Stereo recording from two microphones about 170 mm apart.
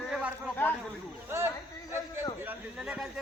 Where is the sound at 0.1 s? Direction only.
5° right (ahead or behind).